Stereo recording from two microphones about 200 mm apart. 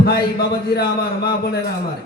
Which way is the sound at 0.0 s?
50° left (ahead or behind).